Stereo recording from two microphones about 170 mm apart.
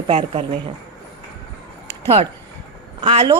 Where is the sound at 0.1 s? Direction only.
35° right (ahead or behind).